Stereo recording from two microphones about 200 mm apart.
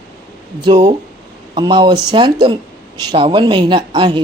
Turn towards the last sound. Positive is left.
turn(degrees=-20)  # may be behind; listen again after turning